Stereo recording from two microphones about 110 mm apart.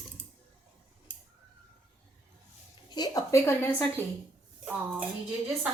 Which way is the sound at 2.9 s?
35° left (ahead or behind).